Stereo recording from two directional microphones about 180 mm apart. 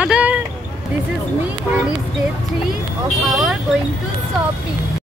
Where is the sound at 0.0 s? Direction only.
5° right (ahead or behind).